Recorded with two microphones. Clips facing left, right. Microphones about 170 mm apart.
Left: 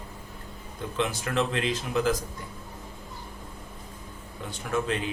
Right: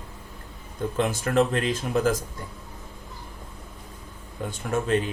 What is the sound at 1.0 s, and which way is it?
Speech, 45° right (ahead or behind).